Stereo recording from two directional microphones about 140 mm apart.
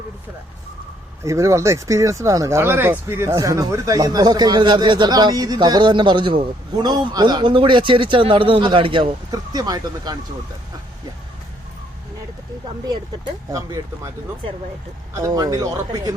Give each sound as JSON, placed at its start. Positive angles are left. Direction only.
{"t": 1.2, "sound": "speech", "side_deg": -20}
{"t": 12.8, "sound": "speech", "side_deg": -30}
{"t": 15.1, "sound": "speech", "side_deg": -25}